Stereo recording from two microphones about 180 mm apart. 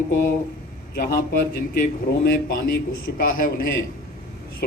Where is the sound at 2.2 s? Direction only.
55° left (ahead or behind).